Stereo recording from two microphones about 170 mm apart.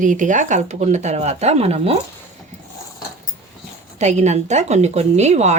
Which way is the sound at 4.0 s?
40° right (ahead or behind).